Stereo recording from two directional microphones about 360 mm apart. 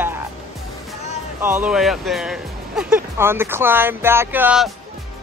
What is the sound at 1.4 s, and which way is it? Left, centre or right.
Speech, centre.